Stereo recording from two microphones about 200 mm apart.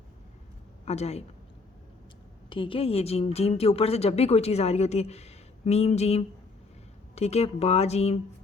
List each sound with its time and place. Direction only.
0.9 s a woman's voice: 30° left (ahead or behind)
2.5 s a woman's voice: 25° left (ahead or behind)